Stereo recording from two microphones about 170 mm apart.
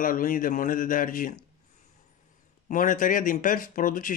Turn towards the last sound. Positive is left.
turn(degrees=55)  # may be behind; listen again after turning